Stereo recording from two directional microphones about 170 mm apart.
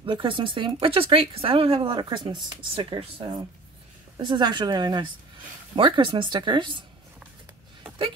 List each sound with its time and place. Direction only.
0.0 s speech: 30° right (ahead or behind)